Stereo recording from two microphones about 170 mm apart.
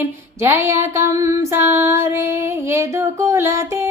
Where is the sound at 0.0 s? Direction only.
15° right (ahead or behind).